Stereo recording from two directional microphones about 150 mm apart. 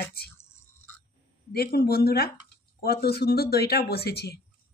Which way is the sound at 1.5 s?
90° left.